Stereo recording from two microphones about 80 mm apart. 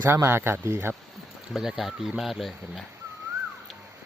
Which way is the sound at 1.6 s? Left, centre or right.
Centre.